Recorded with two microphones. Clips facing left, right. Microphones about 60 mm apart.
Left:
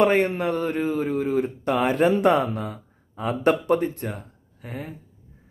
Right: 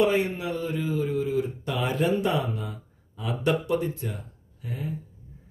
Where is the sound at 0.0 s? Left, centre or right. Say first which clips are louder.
Left 4 dB; left.